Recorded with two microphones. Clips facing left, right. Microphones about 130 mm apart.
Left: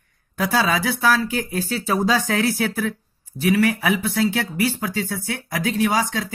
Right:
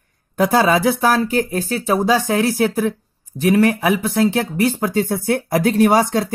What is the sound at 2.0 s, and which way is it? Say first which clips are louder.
Speech: right 3 dB; 15° right (ahead or behind).